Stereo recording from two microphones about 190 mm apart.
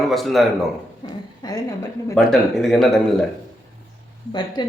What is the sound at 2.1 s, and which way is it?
Speech, centre (ahead or behind).